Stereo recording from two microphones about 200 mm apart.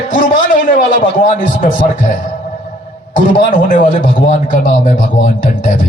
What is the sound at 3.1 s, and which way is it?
A man's voice, 40° left (ahead or behind).